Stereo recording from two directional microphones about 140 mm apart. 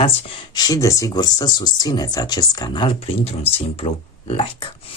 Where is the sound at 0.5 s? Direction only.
25° left (ahead or behind); by 3.9 s 45° left (ahead or behind).